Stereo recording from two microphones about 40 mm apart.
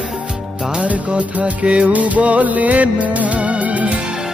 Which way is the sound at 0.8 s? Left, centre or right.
Right.